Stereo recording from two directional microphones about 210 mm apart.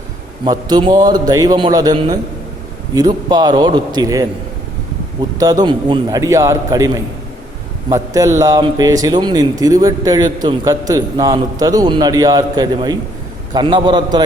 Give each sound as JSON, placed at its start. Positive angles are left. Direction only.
{"t": 0.4, "sound": "a man's voice", "side_deg": -20}
{"t": 5.6, "sound": "a man's voice", "side_deg": -20}